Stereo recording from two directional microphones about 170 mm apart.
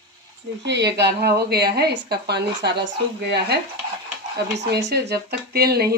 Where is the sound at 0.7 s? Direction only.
80° right.